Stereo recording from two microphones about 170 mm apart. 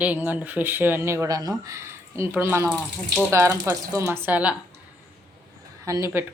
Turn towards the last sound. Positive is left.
turn(degrees=-15)  # may be behind; listen again after turning